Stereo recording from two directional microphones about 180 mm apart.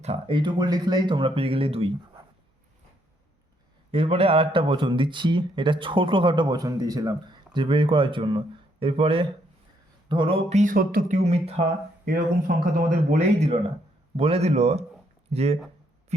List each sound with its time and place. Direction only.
0.0 s speech: 30° right (ahead or behind)
3.9 s speech: 30° right (ahead or behind)
10.6 s speech: 50° right (ahead or behind)
11.2 s a man's voice: 35° right (ahead or behind)
12.0 s a man's voice: 55° right (ahead or behind); by 15.5 s 35° right (ahead or behind)